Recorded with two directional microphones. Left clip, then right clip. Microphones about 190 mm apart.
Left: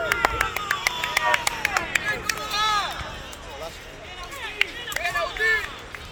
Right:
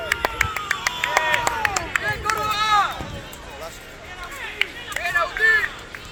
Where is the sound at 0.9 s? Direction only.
75° left (ahead or behind).